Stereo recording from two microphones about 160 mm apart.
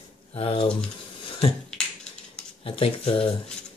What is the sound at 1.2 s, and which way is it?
Finger snapping, 35° left (ahead or behind).